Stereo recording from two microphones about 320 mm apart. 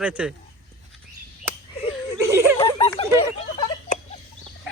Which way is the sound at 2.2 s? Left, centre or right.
Centre.